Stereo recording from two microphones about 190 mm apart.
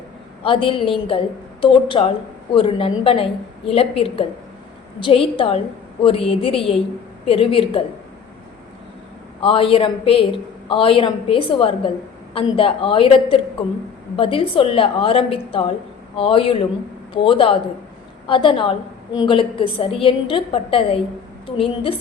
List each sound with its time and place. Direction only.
0.4 s a woman's voice: 30° left (ahead or behind)
9.4 s a woman's voice: 30° left (ahead or behind)